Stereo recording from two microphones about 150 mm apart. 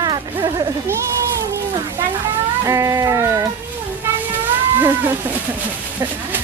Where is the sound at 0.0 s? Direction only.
30° right (ahead or behind).